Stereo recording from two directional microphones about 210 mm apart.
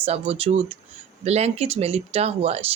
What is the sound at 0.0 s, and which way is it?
Speech, 25° right (ahead or behind).